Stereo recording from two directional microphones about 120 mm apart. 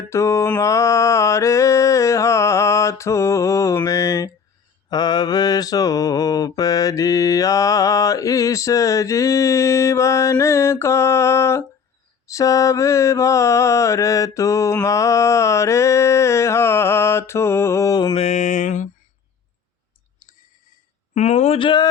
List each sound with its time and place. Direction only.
0.1 s mantra: 25° left (ahead or behind)
18.2 s mantra: 75° left (ahead or behind); by 18.9 s 90° left
21.2 s speech: 70° left (ahead or behind)
21.6 s speech: 40° left (ahead or behind)